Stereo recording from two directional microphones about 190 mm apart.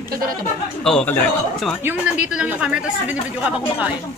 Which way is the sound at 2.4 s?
5° right (ahead or behind).